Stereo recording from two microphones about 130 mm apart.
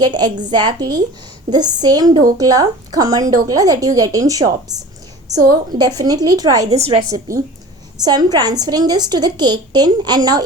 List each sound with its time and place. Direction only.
0.0 s a woman's voice: 35° right (ahead or behind)
6.7 s a woman's voice: 50° right (ahead or behind)
7.1 s a woman's voice: 25° right (ahead or behind)